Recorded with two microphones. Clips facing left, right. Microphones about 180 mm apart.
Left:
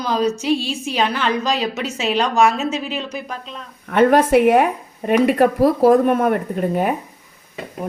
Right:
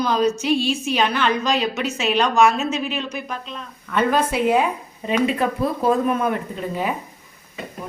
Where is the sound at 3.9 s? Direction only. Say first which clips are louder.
Left 7 dB; 60° left (ahead or behind).